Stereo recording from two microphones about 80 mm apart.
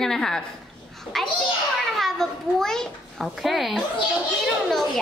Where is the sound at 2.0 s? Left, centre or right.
Centre.